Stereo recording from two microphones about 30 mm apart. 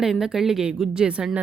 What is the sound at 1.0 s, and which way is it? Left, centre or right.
Speech, right.